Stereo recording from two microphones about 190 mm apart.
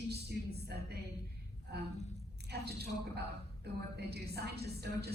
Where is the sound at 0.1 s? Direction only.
60° right (ahead or behind).